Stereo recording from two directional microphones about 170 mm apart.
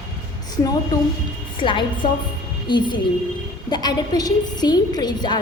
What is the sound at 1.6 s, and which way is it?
A woman's voice, 30° left (ahead or behind).